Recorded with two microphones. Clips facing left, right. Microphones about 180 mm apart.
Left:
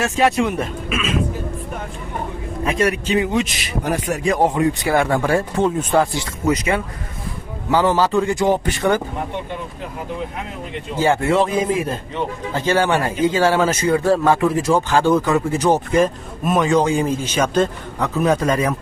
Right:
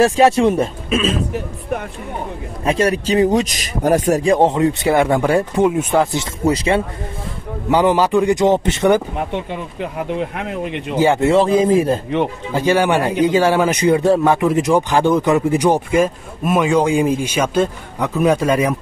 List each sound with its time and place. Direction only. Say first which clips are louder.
0.0 s speech: right 6 dB; 35° right (ahead or behind)
2.6 s speech: right 3 dB; 30° right (ahead or behind)
4.3 s speech: right 1 dB; 25° right (ahead or behind)
6.4 s speech: right 3 dB; 30° right (ahead or behind)
7.7 s speech: right 2 dB; 15° right (ahead or behind)
10.3 s speech: right 6 dB; 70° right (ahead or behind)
11.0 s speech: right 3 dB; 20° right (ahead or behind); by 12.0 s 35° right (ahead or behind)
12.5 s speech: right 3 dB; 15° right (ahead or behind)